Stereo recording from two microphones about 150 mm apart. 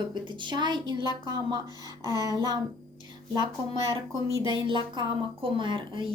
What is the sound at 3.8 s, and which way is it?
A woman's voice, 35° right (ahead or behind).